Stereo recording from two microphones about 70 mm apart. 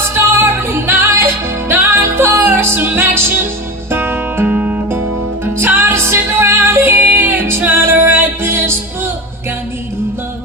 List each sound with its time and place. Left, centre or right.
0.1 s music: right
4.5 s music: centre
4.9 s music: right